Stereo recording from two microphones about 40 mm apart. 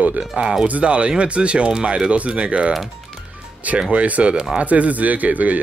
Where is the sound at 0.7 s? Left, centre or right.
Right.